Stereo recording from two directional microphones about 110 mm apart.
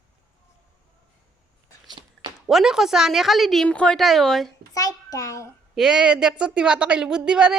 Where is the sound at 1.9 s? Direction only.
40° right (ahead or behind).